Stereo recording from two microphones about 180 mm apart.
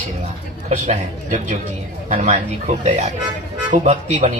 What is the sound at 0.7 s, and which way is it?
A man's voice, 40° right (ahead or behind).